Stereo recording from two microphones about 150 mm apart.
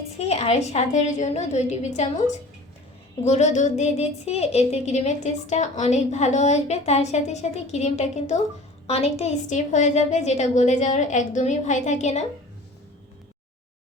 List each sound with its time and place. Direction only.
0.2 s a woman's voice: 45° left (ahead or behind)
3.2 s a woman's voice: 50° left (ahead or behind)